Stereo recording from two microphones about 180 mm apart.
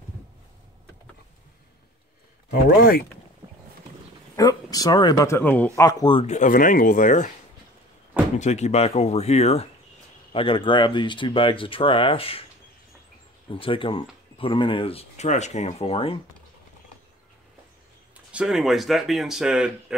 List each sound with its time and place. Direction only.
2.5 s speech: 60° left (ahead or behind)
4.4 s speech: 20° left (ahead or behind)
6.2 s speech: 45° left (ahead or behind)
8.4 s speech: 40° left (ahead or behind)
13.5 s speech: 30° left (ahead or behind)
18.1 s speech: 5° right (ahead or behind)